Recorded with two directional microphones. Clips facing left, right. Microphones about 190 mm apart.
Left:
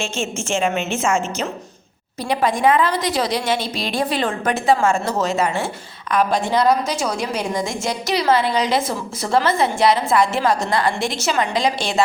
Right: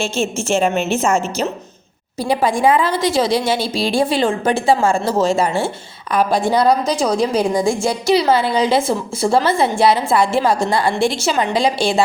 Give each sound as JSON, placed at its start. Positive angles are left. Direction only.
{"t": 0.0, "sound": "a woman's voice", "side_deg": -35}